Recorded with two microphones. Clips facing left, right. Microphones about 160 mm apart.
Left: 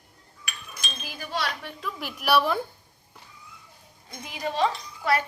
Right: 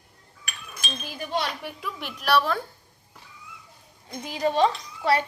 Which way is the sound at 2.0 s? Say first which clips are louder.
Even; 10° left (ahead or behind).